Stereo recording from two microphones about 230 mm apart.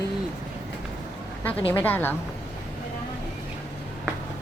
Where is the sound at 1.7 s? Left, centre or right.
Centre.